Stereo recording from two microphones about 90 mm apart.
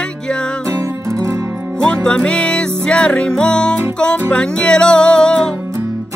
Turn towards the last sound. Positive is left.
turn(degrees=10)  # may be behind; listen again after turning